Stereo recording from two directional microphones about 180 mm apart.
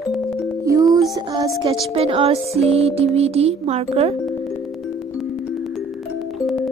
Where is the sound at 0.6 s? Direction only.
20° right (ahead or behind).